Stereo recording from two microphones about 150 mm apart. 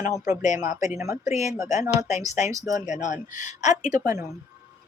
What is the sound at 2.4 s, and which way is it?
Speech, 20° right (ahead or behind).